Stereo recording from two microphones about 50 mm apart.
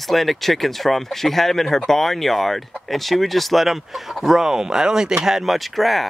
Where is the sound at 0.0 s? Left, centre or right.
Centre.